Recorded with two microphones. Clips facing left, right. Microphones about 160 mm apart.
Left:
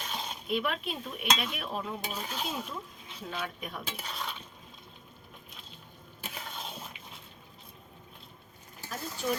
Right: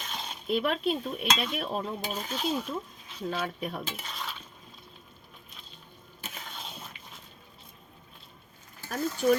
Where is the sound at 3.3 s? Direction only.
35° right (ahead or behind).